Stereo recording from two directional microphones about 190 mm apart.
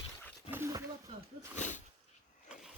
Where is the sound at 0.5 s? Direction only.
15° right (ahead or behind).